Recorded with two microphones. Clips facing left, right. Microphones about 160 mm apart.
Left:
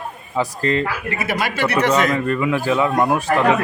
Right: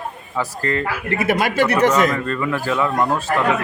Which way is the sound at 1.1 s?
50° right (ahead or behind).